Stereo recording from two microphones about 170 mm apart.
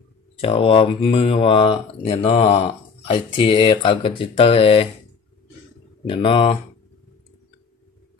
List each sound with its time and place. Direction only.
0.4 s speech: 30° left (ahead or behind)
6.0 s speech: 30° left (ahead or behind)